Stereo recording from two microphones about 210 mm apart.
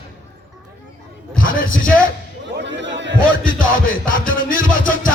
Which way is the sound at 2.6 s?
60° right (ahead or behind).